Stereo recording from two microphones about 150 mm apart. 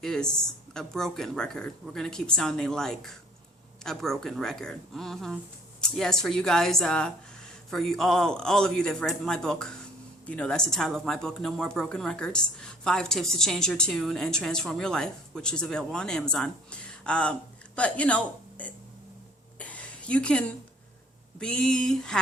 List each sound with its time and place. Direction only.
0.0 s speech: 5° left (ahead or behind)
19.5 s a sound: 10° left (ahead or behind)
21.3 s speech: 5° left (ahead or behind)